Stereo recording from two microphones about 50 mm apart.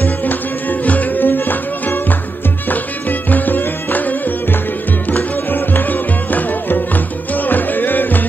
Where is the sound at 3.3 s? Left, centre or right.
Left.